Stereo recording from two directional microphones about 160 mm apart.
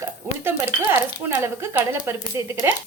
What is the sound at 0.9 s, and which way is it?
Speech, 15° right (ahead or behind).